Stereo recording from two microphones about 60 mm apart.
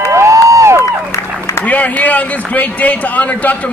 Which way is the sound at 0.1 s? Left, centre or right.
Right.